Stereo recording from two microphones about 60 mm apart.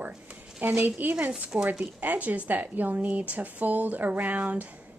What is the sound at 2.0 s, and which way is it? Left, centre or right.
Speech, right.